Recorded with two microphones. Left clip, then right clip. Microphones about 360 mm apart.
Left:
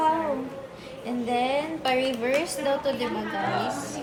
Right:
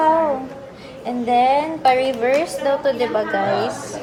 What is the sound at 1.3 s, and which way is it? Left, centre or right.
A woman's voice, right.